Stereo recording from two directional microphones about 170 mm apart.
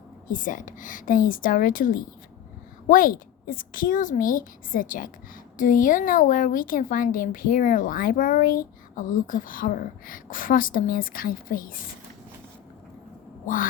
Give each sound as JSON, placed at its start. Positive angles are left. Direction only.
{"t": 0.3, "sound": "speech", "side_deg": 50}